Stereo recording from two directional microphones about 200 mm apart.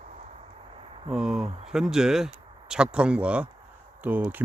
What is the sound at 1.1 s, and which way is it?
Speech, 5° right (ahead or behind).